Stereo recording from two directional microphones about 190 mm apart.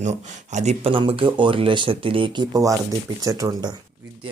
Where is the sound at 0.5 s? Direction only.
35° right (ahead or behind); by 3.7 s 20° right (ahead or behind).